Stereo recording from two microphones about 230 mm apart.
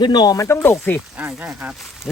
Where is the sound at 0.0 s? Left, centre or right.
Centre.